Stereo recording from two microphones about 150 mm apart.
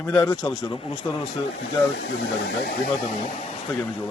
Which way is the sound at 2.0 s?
90° left.